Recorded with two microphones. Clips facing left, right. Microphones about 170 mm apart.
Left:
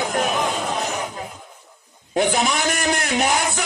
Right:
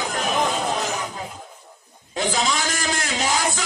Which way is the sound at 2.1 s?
55° left (ahead or behind).